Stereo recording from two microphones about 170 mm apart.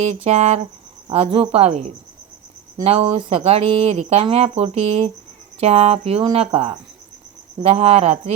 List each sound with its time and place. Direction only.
0.3 s speech: 40° right (ahead or behind)